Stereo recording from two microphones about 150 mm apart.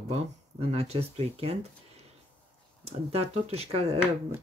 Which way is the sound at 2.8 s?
45° right (ahead or behind).